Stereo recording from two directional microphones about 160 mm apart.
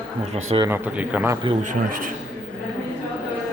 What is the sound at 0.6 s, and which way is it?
Speech, 10° right (ahead or behind).